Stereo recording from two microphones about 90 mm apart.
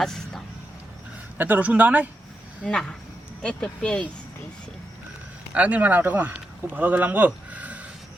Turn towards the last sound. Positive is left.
turn(degrees=-15)  # may be behind; listen again after turning